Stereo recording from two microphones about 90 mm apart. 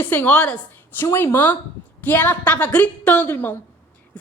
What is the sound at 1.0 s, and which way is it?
A woman's voice, 25° left (ahead or behind).